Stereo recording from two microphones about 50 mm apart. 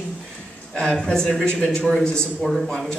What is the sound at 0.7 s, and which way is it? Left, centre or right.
Speech, centre.